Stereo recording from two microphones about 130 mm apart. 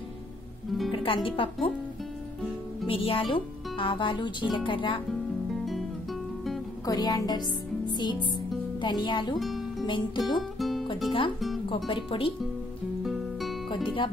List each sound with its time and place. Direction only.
0.9 s speech: 45° left (ahead or behind)
2.9 s speech: 45° left (ahead or behind)
6.9 s speech: 30° left (ahead or behind)
7.9 s music: 35° left (ahead or behind)
8.8 s speech: 35° left (ahead or behind)
9.4 s music: centre (ahead or behind)
9.8 s speech: 35° left (ahead or behind)
10.6 s music: centre (ahead or behind)
11.1 s speech: 40° left (ahead or behind)
11.3 s speech: centre (ahead or behind)
11.9 s speech: 45° left (ahead or behind)
13.0 s music: centre (ahead or behind)